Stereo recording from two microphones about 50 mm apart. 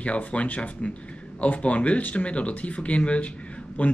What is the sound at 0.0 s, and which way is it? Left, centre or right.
Speech, left.